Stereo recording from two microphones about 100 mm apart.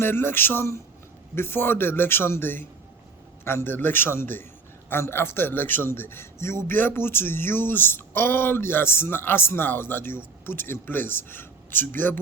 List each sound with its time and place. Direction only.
0.0 s a man's voice: 20° left (ahead or behind)